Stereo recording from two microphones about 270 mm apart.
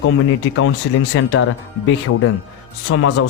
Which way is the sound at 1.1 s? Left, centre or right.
Left.